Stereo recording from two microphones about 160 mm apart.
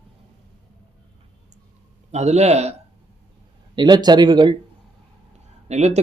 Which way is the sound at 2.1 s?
45° right (ahead or behind).